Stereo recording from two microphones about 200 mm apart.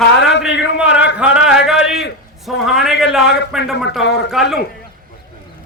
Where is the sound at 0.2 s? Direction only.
60° left (ahead or behind).